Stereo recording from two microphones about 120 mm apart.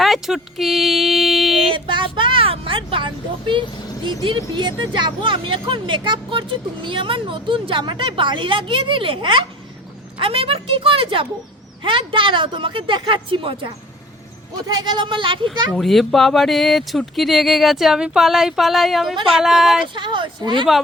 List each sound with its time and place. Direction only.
0.0 s a sound: centre (ahead or behind)
1.7 s vehicle: 45° right (ahead or behind)
4.2 s speech: 40° right (ahead or behind)
14.7 s speech: 35° right (ahead or behind)
15.7 s speech: centre (ahead or behind)
19.9 s speech: 40° right (ahead or behind)